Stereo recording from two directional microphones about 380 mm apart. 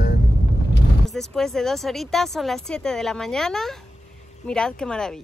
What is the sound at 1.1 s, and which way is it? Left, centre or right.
Speech, centre.